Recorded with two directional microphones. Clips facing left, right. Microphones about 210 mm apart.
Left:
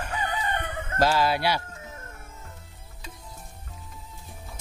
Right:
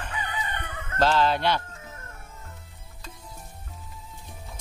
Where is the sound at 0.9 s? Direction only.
10° left (ahead or behind).